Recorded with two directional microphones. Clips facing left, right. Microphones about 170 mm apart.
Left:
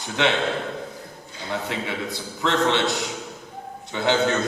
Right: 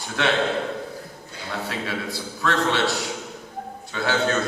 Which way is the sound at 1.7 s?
20° left (ahead or behind).